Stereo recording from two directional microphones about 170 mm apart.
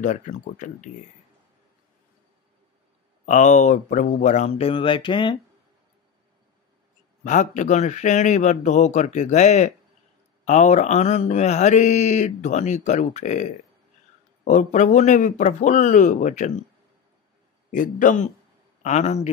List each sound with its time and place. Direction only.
0.0 s mantra: 45° left (ahead or behind)
3.3 s mantra: 45° left (ahead or behind); by 5.4 s 30° left (ahead or behind)
7.2 s mantra: 45° left (ahead or behind)
17.6 s mantra: 50° left (ahead or behind)
18.8 s a man's voice: 40° left (ahead or behind)